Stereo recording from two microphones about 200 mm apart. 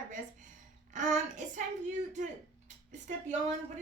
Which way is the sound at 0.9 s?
40° right (ahead or behind).